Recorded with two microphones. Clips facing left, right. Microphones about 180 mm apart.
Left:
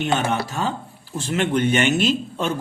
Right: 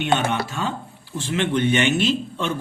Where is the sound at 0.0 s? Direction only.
40° left (ahead or behind).